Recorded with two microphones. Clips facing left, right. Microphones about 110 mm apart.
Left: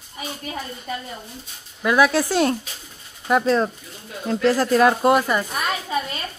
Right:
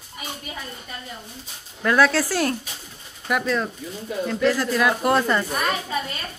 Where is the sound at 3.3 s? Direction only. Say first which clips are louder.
Left 5 dB; 30° left (ahead or behind).